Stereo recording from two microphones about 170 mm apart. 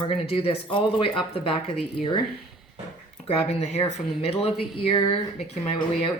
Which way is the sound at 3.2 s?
35° left (ahead or behind).